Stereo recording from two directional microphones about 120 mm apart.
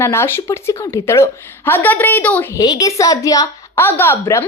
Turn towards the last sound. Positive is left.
turn(degrees=20)  # may be behind; listen again after turning